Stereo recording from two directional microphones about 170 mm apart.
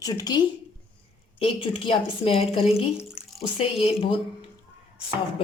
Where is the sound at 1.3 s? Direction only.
30° left (ahead or behind).